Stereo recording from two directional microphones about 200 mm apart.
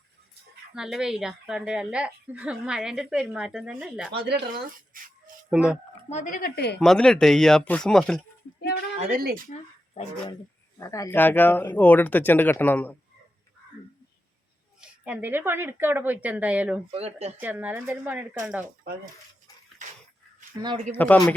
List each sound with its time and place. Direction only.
0.7 s speech: 5° right (ahead or behind)
4.2 s speech: 50° right (ahead or behind)
5.5 s speech: 5° right (ahead or behind)
6.1 s speech: 40° left (ahead or behind)
6.7 s speech: 5° left (ahead or behind)
9.2 s speech: 45° right (ahead or behind)
10.0 s speech: 30° left (ahead or behind)
10.8 s speech: 15° left (ahead or behind)
14.8 s a woman's voice: 5° right (ahead or behind)
16.9 s speech: 35° right (ahead or behind)
17.3 s a woman's voice: 10° right (ahead or behind)
20.6 s speech: 25° right (ahead or behind)
20.9 s speech: 10° left (ahead or behind)